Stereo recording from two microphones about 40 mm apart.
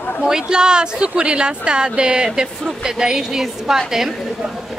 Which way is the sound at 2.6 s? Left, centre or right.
Centre.